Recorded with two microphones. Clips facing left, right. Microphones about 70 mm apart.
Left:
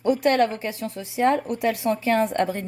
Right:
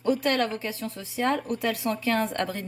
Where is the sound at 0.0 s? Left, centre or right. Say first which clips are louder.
Left 5 dB; left.